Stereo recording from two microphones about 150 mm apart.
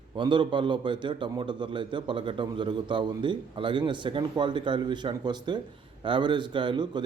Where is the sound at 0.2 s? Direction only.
30° right (ahead or behind).